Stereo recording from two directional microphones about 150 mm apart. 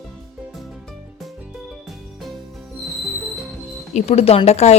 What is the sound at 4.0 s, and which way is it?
Speech, 45° left (ahead or behind).